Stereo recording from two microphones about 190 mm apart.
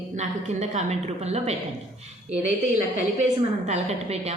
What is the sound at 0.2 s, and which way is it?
A woman's voice, 35° right (ahead or behind).